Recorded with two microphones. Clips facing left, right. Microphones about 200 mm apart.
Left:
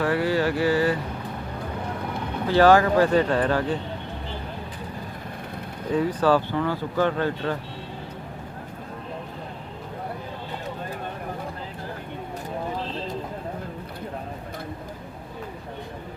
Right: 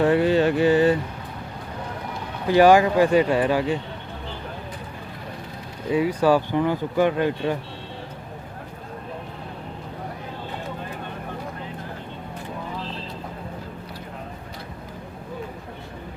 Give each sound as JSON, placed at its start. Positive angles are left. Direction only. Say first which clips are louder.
{"t": 0.0, "sound": "a sound", "louder": "right 4 dB", "side_deg": -20}
{"t": 2.5, "sound": "speech", "louder": "right 2 dB", "side_deg": -15}
{"t": 5.9, "sound": "speech", "louder": "right 2 dB", "side_deg": -10}